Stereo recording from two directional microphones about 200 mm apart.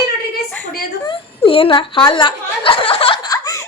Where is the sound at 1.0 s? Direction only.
25° left (ahead or behind).